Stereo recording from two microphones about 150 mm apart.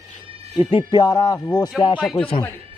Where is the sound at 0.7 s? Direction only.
30° left (ahead or behind).